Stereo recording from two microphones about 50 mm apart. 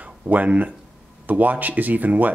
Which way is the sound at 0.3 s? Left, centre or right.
Right.